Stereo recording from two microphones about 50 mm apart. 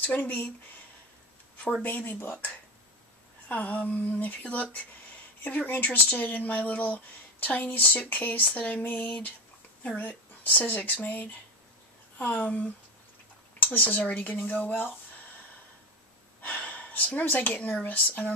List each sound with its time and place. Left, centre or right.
0.0 s speech: left
1.8 s speech: left
3.4 s speech: left
16.3 s gasp: left
17.8 s speech: left